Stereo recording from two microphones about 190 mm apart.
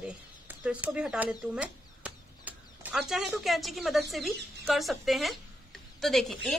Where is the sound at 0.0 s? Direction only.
10° right (ahead or behind).